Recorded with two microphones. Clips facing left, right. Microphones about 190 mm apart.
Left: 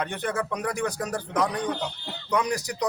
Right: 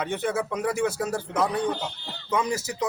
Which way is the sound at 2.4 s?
15° left (ahead or behind).